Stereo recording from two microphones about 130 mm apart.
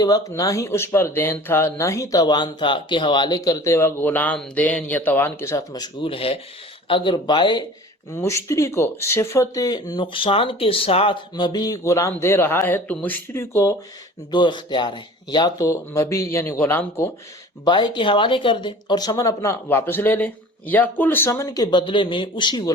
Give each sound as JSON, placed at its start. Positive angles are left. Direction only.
{"t": 0.0, "sound": "speech", "side_deg": 30}
{"t": 8.1, "sound": "speech", "side_deg": 20}
{"t": 14.3, "sound": "speech", "side_deg": 35}
{"t": 17.7, "sound": "speech", "side_deg": 35}
{"t": 21.2, "sound": "speech", "side_deg": 25}